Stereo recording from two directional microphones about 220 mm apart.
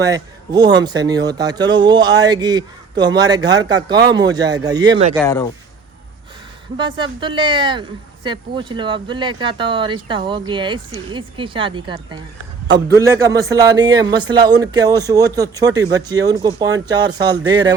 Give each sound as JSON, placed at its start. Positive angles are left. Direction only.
{"t": 0.0, "sound": "speech", "side_deg": -15}
{"t": 5.2, "sound": "speech", "side_deg": 15}
{"t": 6.7, "sound": "speech", "side_deg": -20}